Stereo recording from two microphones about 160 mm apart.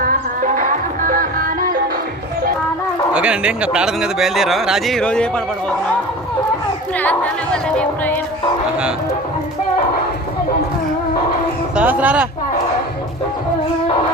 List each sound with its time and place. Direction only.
0.0 s music: 60° right (ahead or behind)
3.1 s a man's voice: 5° right (ahead or behind)
7.0 s a woman's voice: 10° left (ahead or behind)
11.8 s speech: 10° right (ahead or behind)